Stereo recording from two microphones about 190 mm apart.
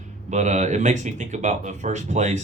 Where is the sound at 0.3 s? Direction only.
40° right (ahead or behind).